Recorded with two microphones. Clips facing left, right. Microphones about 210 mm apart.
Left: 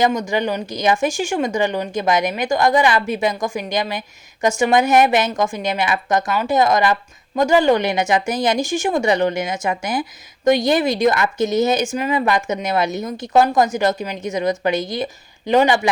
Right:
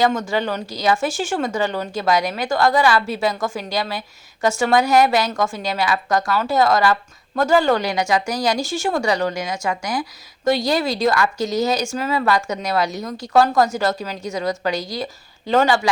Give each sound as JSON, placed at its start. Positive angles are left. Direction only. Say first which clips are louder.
{"t": 0.0, "sound": "speech", "louder": "left 1 dB", "side_deg": 15}